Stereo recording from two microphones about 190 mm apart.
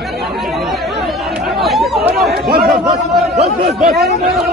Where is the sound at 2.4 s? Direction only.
55° right (ahead or behind).